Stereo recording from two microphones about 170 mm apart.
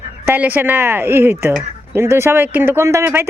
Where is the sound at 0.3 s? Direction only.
10° right (ahead or behind).